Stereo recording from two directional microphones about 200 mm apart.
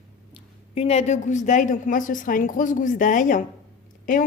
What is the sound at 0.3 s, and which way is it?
A woman's voice, 30° left (ahead or behind).